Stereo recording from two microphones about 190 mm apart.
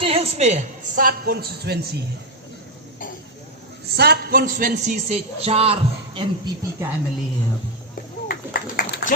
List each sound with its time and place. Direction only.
0.0 s music: 30° right (ahead or behind)
0.9 s speech: 50° right (ahead or behind)
3.9 s a man's voice: 55° right (ahead or behind); by 6.8 s 25° right (ahead or behind)
8.3 s a sound: 55° left (ahead or behind)